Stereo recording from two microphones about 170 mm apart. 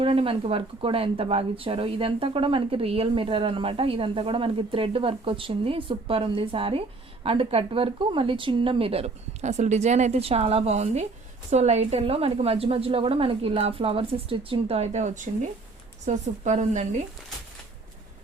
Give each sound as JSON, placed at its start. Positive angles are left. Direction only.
{"t": 0.0, "sound": "a woman's voice", "side_deg": -30}